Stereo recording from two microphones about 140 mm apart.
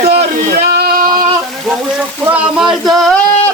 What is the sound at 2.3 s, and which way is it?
Speech, 5° right (ahead or behind).